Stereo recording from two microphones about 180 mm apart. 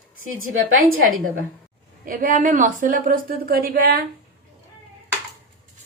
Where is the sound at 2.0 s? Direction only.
50° right (ahead or behind).